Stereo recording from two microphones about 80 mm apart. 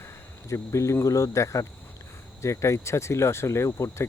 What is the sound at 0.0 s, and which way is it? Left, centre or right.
Speech, left.